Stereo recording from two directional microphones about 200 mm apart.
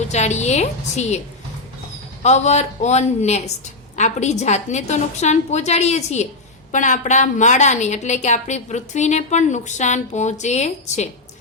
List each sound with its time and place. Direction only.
0.1 s a woman's voice: 35° left (ahead or behind)
2.2 s a woman's voice: 35° left (ahead or behind)